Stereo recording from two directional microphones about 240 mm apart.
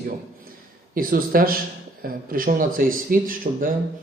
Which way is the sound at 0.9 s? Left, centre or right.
Right.